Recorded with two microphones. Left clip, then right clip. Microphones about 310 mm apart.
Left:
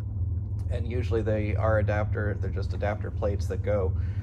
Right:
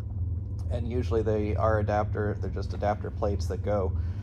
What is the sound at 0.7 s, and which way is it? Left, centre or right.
Speech, centre.